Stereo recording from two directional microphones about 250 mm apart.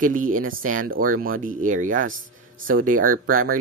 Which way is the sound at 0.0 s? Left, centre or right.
Right.